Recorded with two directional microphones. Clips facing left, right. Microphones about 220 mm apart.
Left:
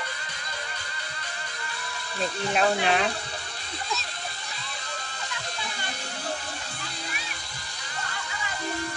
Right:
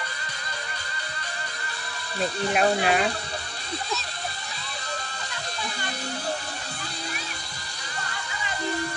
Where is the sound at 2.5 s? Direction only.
5° right (ahead or behind).